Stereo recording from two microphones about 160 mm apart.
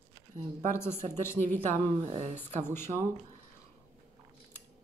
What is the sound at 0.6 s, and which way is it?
Speech, 15° left (ahead or behind).